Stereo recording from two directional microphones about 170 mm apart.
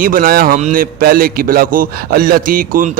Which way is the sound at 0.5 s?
50° right (ahead or behind).